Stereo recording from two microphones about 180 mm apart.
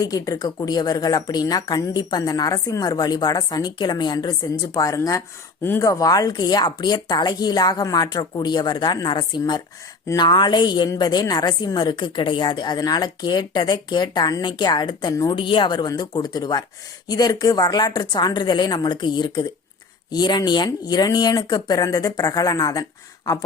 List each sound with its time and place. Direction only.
0.0 s a woman's voice: 20° left (ahead or behind)